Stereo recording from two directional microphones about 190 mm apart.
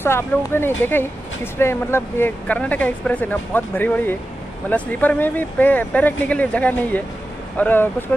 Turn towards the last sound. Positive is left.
turn(degrees=10)  # may be behind; listen again after turning